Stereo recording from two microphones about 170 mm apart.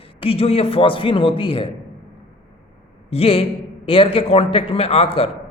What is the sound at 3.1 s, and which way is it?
A man's voice, 35° left (ahead or behind).